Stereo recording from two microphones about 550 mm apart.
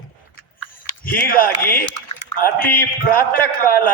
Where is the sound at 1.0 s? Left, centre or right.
Centre.